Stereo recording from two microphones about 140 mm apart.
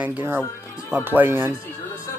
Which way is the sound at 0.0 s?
15° right (ahead or behind).